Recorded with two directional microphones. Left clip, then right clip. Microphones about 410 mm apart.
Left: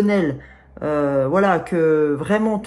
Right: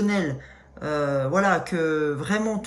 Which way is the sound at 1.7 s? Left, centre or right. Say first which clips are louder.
Left 7 dB; left.